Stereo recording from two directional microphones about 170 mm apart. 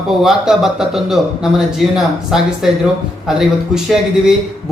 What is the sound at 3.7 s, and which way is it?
Speech, 5° right (ahead or behind).